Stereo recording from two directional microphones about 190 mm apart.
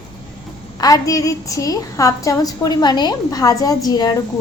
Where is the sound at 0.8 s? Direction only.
20° left (ahead or behind).